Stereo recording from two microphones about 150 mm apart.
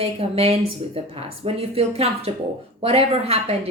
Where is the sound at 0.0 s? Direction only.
40° right (ahead or behind).